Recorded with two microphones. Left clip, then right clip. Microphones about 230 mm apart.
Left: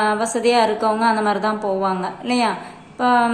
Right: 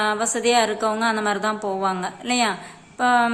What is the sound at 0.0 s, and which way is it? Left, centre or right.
A woman's voice, centre.